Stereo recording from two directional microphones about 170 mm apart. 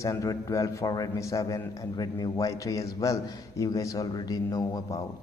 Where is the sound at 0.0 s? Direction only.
20° left (ahead or behind).